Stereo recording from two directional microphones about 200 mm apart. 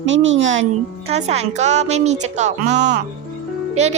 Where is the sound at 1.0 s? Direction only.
30° right (ahead or behind).